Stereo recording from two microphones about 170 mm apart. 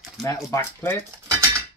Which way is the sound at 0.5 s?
15° left (ahead or behind).